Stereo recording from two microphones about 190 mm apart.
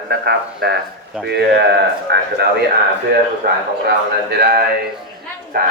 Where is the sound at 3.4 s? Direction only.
55° right (ahead or behind).